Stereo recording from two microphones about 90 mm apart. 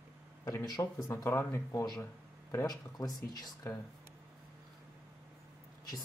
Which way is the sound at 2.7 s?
45° left (ahead or behind).